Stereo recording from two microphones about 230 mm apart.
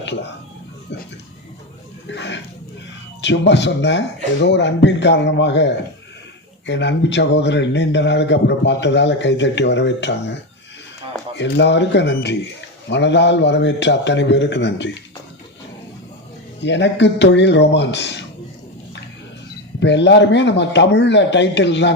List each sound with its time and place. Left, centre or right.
2.0 s a sound: left
3.2 s a man's voice: left
11.3 s a man's voice: left
16.6 s a man's voice: left
19.8 s a man's voice: left